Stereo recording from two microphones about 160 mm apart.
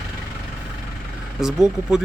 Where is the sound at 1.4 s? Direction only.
5° right (ahead or behind).